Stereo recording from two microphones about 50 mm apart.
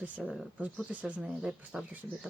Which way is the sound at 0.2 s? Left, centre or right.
Centre.